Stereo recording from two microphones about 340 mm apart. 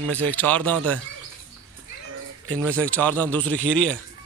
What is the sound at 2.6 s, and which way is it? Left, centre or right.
Speech, centre.